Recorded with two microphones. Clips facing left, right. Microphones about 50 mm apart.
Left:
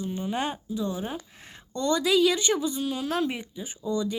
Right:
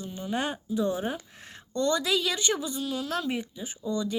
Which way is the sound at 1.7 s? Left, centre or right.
Centre.